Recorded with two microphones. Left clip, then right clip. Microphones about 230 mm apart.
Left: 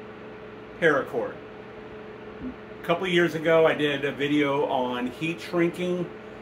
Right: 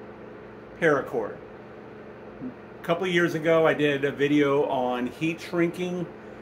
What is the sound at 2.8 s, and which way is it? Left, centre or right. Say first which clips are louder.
Speech: left 1 dB; right.